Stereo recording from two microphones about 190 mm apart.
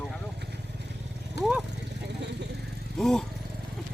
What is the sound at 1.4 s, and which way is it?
Speech, 60° left (ahead or behind).